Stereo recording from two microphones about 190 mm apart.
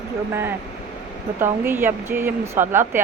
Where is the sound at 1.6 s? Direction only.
10° right (ahead or behind).